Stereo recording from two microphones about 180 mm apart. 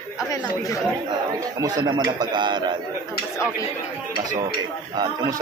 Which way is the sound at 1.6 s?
20° right (ahead or behind).